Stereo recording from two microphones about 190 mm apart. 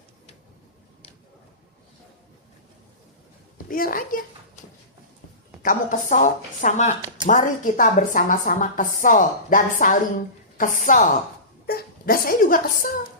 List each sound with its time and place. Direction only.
3.7 s a woman's voice: 50° left (ahead or behind)
5.6 s a woman's voice: 45° left (ahead or behind)
11.6 s speech: 55° left (ahead or behind)